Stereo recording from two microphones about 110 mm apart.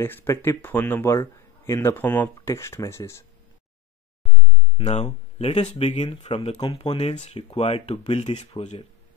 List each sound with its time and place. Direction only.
0.0 s speech: 20° left (ahead or behind)
2.3 s speech: 30° left (ahead or behind)
4.8 s speech: 85° left
6.0 s speech: 60° left (ahead or behind)